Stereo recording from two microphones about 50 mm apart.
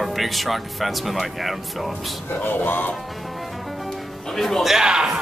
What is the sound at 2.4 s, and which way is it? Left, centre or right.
Speech, left.